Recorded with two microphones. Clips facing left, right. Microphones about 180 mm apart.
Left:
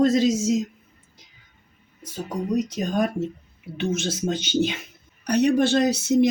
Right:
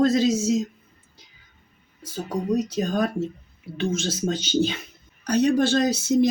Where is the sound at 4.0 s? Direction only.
15° left (ahead or behind).